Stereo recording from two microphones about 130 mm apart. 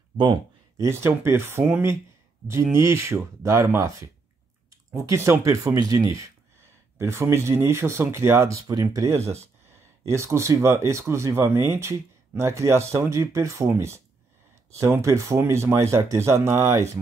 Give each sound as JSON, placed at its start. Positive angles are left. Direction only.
{"t": 0.1, "sound": "speech", "side_deg": -35}
{"t": 0.7, "sound": "speech", "side_deg": -20}